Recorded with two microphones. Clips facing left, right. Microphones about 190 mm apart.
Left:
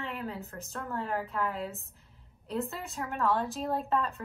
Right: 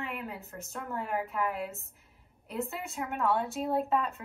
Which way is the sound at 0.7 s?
15° right (ahead or behind).